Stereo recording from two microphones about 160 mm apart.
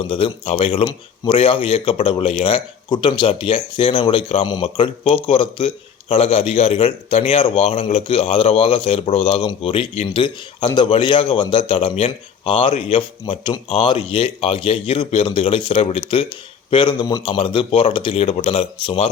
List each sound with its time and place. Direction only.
0.0 s a man's voice: 35° left (ahead or behind)